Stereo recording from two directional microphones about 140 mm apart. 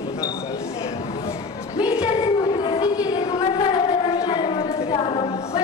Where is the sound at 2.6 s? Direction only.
30° left (ahead or behind).